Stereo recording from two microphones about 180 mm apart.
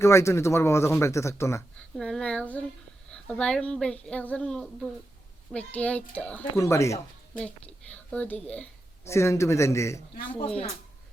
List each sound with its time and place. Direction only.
0.0 s speech: 15° left (ahead or behind)
2.0 s speech: 5° left (ahead or behind)